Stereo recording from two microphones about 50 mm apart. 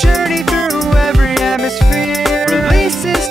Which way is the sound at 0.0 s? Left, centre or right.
Centre.